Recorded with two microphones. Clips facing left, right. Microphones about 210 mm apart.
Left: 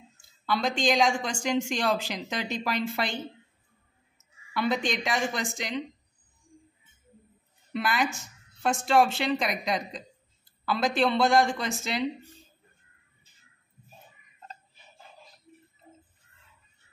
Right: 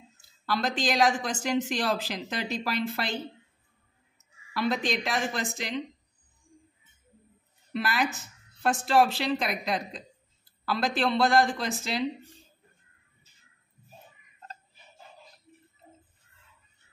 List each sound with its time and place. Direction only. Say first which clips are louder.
0.2 s speech: left 1 dB; centre (ahead or behind)
4.6 s speech: even; centre (ahead or behind)
7.7 s speech: left 1 dB; centre (ahead or behind)